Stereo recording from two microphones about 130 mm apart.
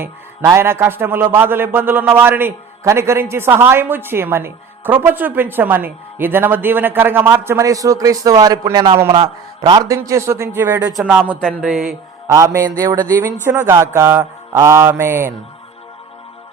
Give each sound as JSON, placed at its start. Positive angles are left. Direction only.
{"t": 0.4, "sound": "a man's voice", "side_deg": -20}
{"t": 9.6, "sound": "mantra", "side_deg": -25}
{"t": 10.9, "sound": "a man's voice", "side_deg": -10}
{"t": 11.3, "sound": "mantra", "side_deg": 10}
{"t": 11.6, "sound": "a man's voice", "side_deg": -5}
{"t": 12.3, "sound": "mantra", "side_deg": -25}
{"t": 13.1, "sound": "a man's voice", "side_deg": -15}
{"t": 13.9, "sound": "mantra", "side_deg": -20}